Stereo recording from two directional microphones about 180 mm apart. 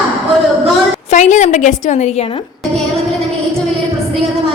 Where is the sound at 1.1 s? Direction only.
40° left (ahead or behind).